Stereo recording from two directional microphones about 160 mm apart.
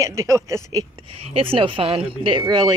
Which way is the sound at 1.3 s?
35° right (ahead or behind).